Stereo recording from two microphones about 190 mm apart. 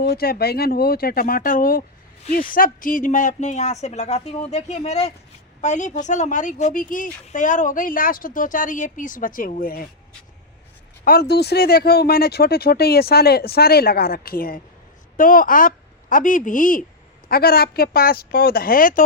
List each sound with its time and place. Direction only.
0.0 s speech: 55° left (ahead or behind)
11.0 s a woman's voice: 55° left (ahead or behind)